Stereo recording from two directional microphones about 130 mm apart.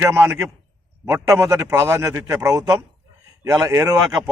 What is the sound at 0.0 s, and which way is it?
A man's voice, 20° right (ahead or behind).